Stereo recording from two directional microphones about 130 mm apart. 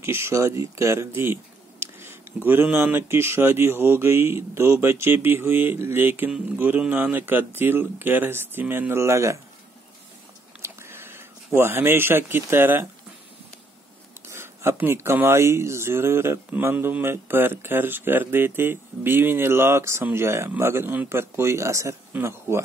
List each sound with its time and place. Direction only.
0.0 s speech: 20° right (ahead or behind)
10.6 s a sound: 20° right (ahead or behind)
14.3 s speech: 20° right (ahead or behind)